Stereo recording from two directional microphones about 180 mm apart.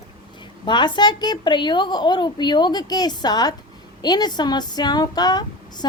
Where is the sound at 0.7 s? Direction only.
25° left (ahead or behind).